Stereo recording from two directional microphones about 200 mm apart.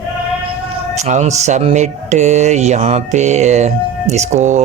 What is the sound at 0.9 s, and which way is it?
Speech, 35° right (ahead or behind).